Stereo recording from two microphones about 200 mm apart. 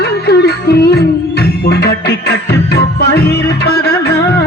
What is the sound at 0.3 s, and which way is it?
Music, 55° left (ahead or behind).